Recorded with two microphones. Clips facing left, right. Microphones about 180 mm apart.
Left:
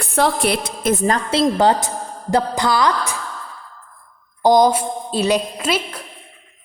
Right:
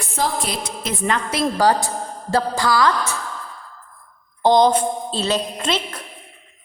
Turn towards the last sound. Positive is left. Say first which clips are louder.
# left 2 dB
turn(degrees=10)  # may be behind; listen again after turning